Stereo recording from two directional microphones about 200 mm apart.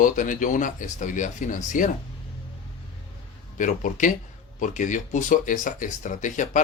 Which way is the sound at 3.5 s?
40° left (ahead or behind).